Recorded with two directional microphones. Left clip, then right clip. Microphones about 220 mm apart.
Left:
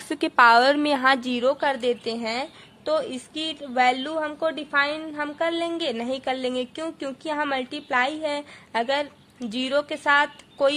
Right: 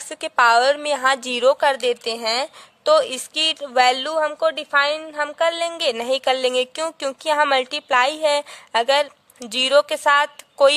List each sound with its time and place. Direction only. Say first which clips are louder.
0.1 s a woman's voice: right 1 dB; 30° right (ahead or behind); by 10.7 s 45° right (ahead or behind)